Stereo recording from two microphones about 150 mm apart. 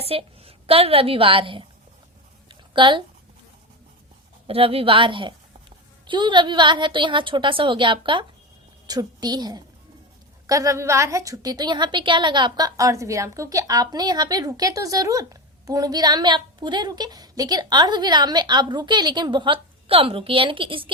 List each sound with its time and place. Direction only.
0.1 s a woman's voice: 40° right (ahead or behind)
2.5 s a sound: 35° right (ahead or behind)
4.4 s a woman's voice: 40° right (ahead or behind)